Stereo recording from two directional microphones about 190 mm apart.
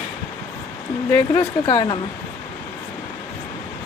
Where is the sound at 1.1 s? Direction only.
20° left (ahead or behind).